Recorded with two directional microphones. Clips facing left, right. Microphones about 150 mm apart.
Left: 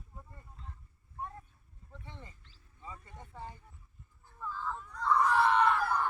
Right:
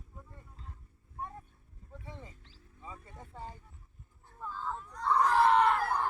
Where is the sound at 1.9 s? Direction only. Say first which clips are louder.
Right 3 dB; 5° right (ahead or behind).